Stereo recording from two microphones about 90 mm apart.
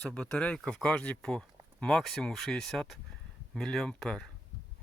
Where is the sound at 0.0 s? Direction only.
10° left (ahead or behind).